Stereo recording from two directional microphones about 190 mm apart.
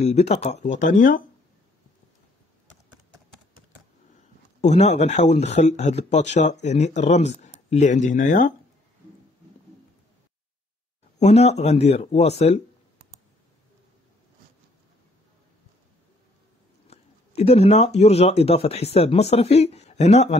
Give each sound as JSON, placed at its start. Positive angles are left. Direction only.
{"t": 0.0, "sound": "speech", "side_deg": 35}
{"t": 4.6, "sound": "speech", "side_deg": 35}
{"t": 11.1, "sound": "speech", "side_deg": 35}
{"t": 16.8, "sound": "speech", "side_deg": 35}